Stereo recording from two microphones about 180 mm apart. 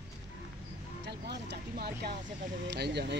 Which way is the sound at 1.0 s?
70° right (ahead or behind).